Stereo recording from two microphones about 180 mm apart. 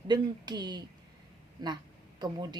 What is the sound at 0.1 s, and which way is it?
Speech, 25° right (ahead or behind).